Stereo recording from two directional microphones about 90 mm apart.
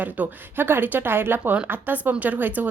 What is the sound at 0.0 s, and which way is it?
A woman's voice, 20° right (ahead or behind).